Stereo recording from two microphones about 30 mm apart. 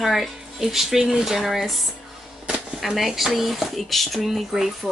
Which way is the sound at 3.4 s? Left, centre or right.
Centre.